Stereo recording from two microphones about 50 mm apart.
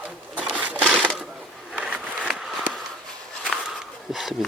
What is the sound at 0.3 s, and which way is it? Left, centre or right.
Sewing machine, right.